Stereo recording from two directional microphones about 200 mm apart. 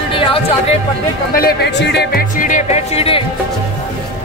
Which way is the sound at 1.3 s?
55° left (ahead or behind).